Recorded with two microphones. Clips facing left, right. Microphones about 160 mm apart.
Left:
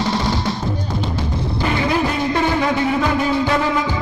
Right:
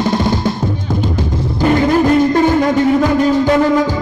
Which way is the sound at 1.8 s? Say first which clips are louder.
Right 9 dB; 45° right (ahead or behind).